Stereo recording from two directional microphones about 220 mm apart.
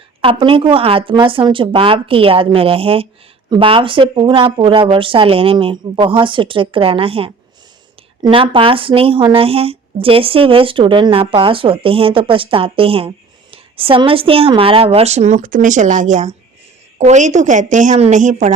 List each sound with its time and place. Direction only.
0.2 s a woman's voice: 25° right (ahead or behind)